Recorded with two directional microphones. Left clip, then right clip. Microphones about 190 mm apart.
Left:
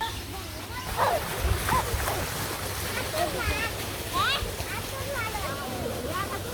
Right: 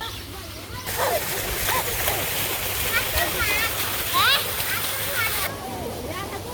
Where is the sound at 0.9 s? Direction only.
50° right (ahead or behind).